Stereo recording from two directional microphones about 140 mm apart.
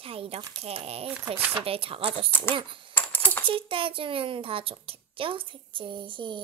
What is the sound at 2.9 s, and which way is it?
Coin, 10° left (ahead or behind).